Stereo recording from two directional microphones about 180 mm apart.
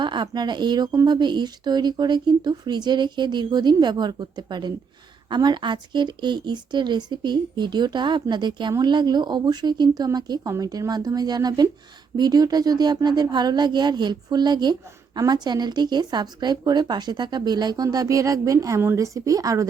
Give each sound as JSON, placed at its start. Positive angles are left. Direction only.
{"t": 0.0, "sound": "speech", "side_deg": -25}